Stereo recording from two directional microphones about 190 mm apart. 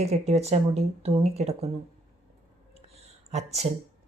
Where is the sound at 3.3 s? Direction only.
35° right (ahead or behind).